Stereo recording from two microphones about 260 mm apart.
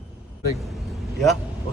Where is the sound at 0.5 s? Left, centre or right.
Centre.